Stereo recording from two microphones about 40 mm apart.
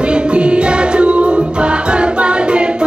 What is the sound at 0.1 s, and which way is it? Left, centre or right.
Music, right.